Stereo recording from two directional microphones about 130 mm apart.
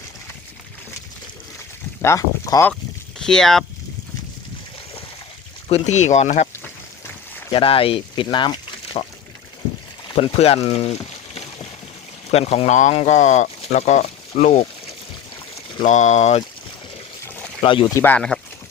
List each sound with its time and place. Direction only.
2.0 s speech: 20° left (ahead or behind)
3.2 s speech: 5° left (ahead or behind)
5.6 s speech: 55° left (ahead or behind)
7.5 s speech: 45° left (ahead or behind)
10.2 s speech: 50° left (ahead or behind)
12.3 s speech: 50° left (ahead or behind); by 14.6 s 65° left (ahead or behind)
15.8 s speech: 65° left (ahead or behind)
17.2 s boat: 15° left (ahead or behind)
17.6 s speech: 40° left (ahead or behind)
17.8 s speech: 15° left (ahead or behind)